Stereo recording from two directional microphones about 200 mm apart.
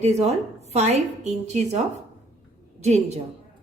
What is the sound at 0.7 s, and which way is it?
Speech, 35° right (ahead or behind).